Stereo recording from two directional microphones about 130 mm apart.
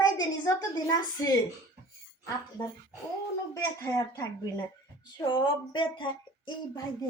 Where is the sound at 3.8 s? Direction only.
25° left (ahead or behind).